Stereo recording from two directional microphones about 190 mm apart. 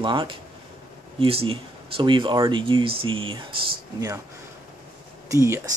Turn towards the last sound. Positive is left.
turn(degrees=-15)  # may be behind; listen again after turning